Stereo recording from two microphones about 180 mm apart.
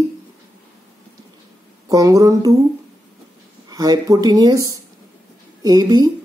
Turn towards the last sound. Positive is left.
turn(degrees=-20)  # may be behind; listen again after turning